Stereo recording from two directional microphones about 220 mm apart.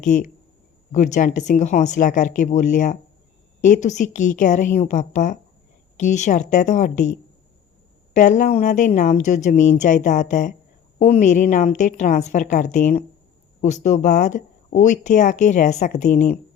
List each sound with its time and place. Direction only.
0.0 s speech: 35° left (ahead or behind)
8.1 s speech: 35° left (ahead or behind)